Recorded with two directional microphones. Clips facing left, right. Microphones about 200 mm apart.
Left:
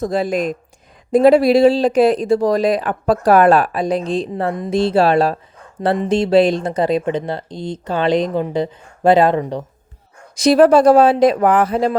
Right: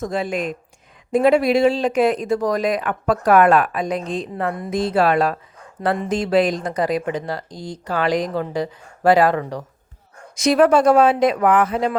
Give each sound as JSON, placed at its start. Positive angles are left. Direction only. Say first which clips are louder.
{"t": 0.0, "sound": "speech", "louder": "left 5 dB", "side_deg": 35}
{"t": 10.3, "sound": "speech", "louder": "left 4 dB", "side_deg": 35}